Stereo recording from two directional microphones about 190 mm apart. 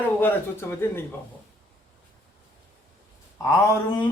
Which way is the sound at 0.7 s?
10° left (ahead or behind).